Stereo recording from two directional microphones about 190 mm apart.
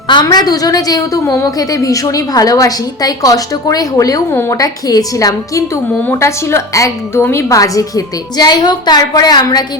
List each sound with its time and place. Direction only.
0.1 s a woman's voice: 20° left (ahead or behind)